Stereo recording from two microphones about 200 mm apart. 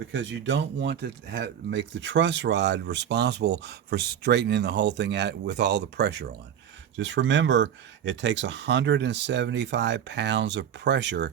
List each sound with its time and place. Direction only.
0.1 s speech: 65° right (ahead or behind)